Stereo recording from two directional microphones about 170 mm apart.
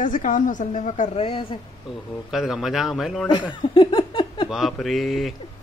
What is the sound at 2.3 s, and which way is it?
Speech, centre (ahead or behind).